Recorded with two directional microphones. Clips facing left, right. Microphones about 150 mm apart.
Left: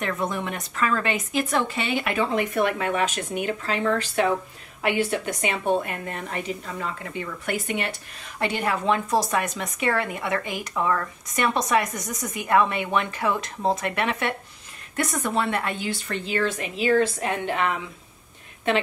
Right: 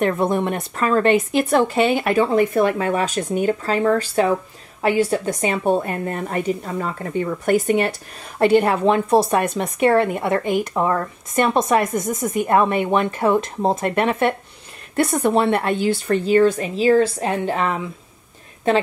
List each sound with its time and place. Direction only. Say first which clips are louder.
0.1 s speech: right 8 dB; 30° right (ahead or behind)
0.4 s a woman's voice: right 8 dB; 50° right (ahead or behind)
0.7 s speech: right 8 dB; 35° right (ahead or behind)
9.1 s a woman's voice: right 7 dB; 60° right (ahead or behind)
10.7 s speech: right 5 dB; 35° right (ahead or behind)
11.5 s a woman's voice: right 4 dB; 50° right (ahead or behind)
11.9 s speech: right 10 dB; 25° right (ahead or behind)
12.2 s a woman's voice: right 10 dB; 50° right (ahead or behind)
12.4 s a woman's voice: right 3 dB; 40° right (ahead or behind)
15.0 s speech: right 8 dB; 30° right (ahead or behind)